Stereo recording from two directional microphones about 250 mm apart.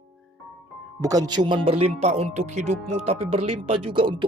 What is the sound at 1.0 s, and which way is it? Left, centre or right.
Speech, centre.